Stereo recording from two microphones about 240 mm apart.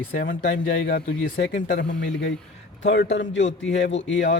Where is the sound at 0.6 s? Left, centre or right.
Left.